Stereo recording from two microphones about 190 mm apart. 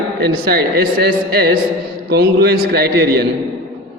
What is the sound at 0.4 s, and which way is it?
A man's voice, 55° right (ahead or behind).